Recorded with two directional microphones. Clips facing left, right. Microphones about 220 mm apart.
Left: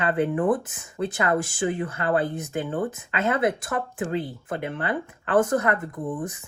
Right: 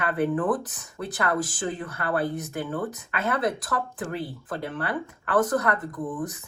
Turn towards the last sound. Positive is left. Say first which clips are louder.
# left 1 dB
turn(degrees=25)  # may be behind; listen again after turning